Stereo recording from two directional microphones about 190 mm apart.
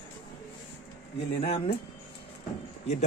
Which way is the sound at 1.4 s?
30° left (ahead or behind).